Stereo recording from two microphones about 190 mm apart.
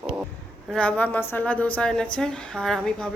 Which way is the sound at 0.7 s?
5° left (ahead or behind).